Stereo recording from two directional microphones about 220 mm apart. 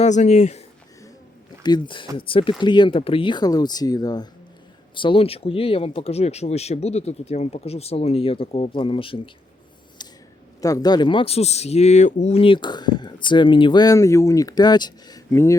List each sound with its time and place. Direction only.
0.0 s speech: 30° left (ahead or behind)
1.6 s speech: 20° left (ahead or behind)
10.0 s a sound: 20° left (ahead or behind)
10.6 s speech: 15° left (ahead or behind)